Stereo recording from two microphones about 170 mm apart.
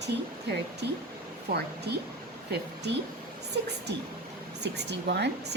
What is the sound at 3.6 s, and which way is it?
Speech, 90° right.